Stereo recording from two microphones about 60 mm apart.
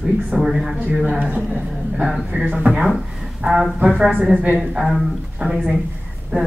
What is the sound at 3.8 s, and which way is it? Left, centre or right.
Speech, centre.